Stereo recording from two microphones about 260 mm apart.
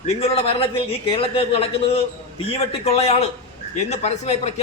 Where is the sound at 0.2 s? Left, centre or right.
Left.